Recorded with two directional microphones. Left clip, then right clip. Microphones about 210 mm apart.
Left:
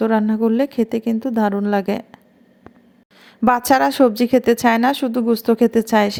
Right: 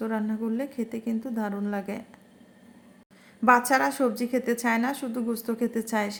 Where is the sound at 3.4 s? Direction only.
40° left (ahead or behind).